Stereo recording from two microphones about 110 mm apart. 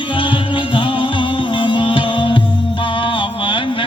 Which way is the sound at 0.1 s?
50° left (ahead or behind).